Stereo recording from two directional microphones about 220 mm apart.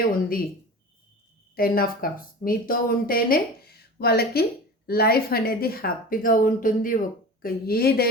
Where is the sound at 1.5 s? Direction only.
40° left (ahead or behind).